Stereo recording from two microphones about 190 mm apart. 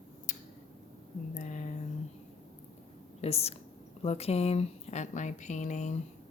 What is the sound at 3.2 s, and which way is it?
A woman's voice, 35° left (ahead or behind).